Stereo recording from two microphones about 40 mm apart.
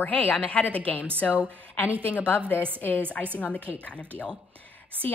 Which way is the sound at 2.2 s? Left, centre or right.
Left.